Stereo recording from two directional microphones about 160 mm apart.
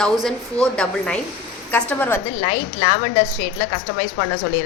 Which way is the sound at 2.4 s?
35° left (ahead or behind).